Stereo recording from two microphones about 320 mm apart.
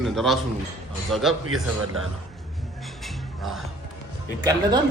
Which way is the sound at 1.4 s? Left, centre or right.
Right.